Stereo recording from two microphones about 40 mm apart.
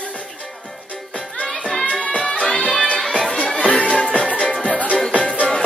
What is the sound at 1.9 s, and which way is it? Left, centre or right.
Music, centre.